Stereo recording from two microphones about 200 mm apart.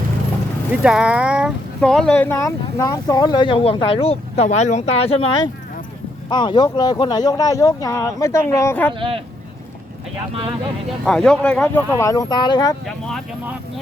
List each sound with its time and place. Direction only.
0.7 s speech: 5° right (ahead or behind); by 8.9 s 10° left (ahead or behind)
11.0 s speech: 5° left (ahead or behind); by 12.7 s 20° left (ahead or behind)
12.8 s speech: centre (ahead or behind)